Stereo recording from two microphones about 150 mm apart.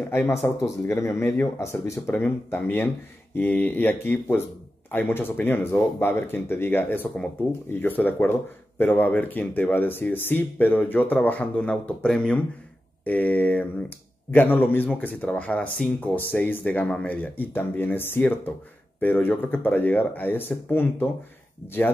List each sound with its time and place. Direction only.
0.1 s speech: 15° left (ahead or behind)